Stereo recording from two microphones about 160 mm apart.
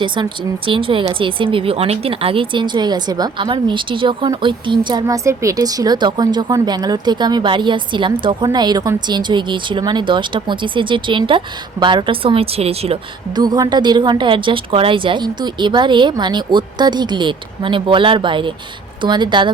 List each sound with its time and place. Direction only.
0.7 s speech: 30° right (ahead or behind)
13.3 s speech: 25° right (ahead or behind)